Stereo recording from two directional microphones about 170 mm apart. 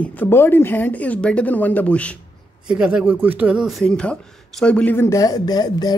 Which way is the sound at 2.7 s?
5° right (ahead or behind).